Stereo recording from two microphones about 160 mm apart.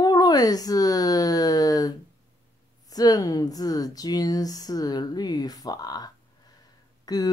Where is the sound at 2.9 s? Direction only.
25° left (ahead or behind).